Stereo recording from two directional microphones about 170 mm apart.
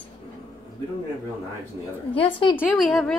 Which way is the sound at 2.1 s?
30° left (ahead or behind).